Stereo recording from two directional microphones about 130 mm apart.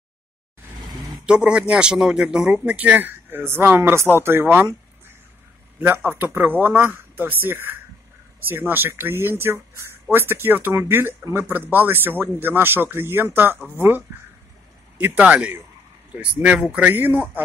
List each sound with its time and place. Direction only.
1.1 s speech: 5° right (ahead or behind)